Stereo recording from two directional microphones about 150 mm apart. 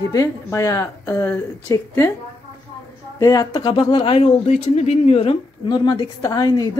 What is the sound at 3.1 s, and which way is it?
Speech, 25° left (ahead or behind).